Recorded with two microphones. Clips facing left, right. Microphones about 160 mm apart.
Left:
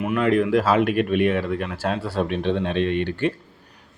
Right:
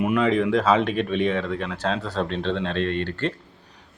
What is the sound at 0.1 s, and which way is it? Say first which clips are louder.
Speech: left 4 dB; 5° left (ahead or behind).